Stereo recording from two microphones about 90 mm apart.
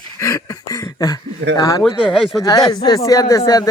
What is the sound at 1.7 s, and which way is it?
Speech, 35° left (ahead or behind).